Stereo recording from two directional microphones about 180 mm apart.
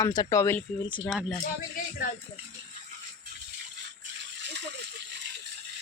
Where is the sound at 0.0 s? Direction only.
20° left (ahead or behind).